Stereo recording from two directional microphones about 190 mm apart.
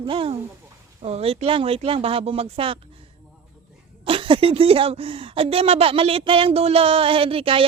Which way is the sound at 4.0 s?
25° right (ahead or behind).